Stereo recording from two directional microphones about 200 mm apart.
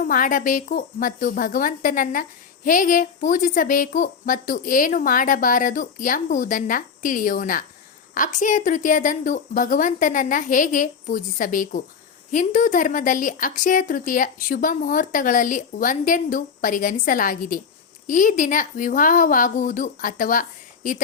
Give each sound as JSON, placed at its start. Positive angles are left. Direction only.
{"t": 0.0, "sound": "a woman's voice", "side_deg": 45}